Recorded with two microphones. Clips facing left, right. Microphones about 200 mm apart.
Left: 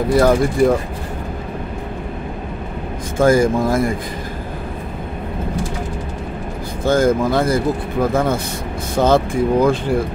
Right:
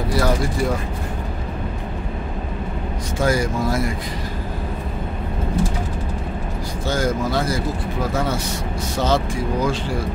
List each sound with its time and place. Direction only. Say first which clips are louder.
0.1 s speech: left 7 dB; 50° left (ahead or behind)
3.2 s speech: left 7 dB; 50° left (ahead or behind)
6.8 s speech: left 7 dB; 55° left (ahead or behind)